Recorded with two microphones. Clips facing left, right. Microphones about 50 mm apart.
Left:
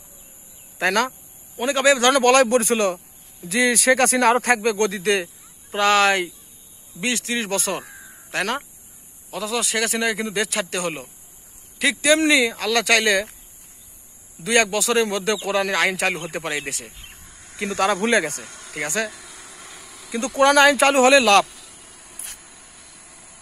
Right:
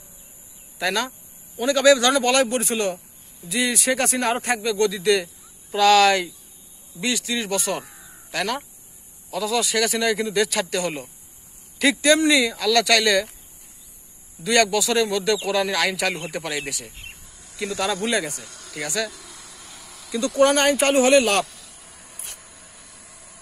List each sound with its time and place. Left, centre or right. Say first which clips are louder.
0.7 s speech: left 4 dB; left
1.7 s speech: right 1 dB; left
5.7 s speech: right 2 dB; left
9.3 s speech: right 2 dB; left
11.8 s speech: right 2 dB; centre
12.3 s speech: even; left
14.4 s a man's voice: even; left
18.4 s speech: left 3 dB; left
19.2 s vehicle: left 2 dB; centre
19.8 s insect: left 1 dB; centre
20.1 s speech: right 1 dB; left
20.3 s speech: left 3 dB; left
21.5 s a sound: left 1 dB; centre